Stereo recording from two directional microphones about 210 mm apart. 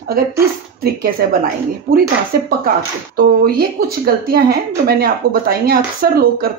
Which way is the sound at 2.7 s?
45° right (ahead or behind).